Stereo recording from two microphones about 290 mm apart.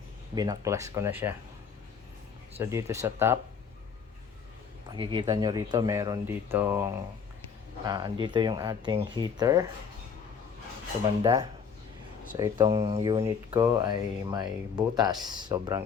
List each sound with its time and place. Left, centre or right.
0.3 s speech: centre
2.6 s speech: centre
4.9 s speech: centre
11.2 s speech: centre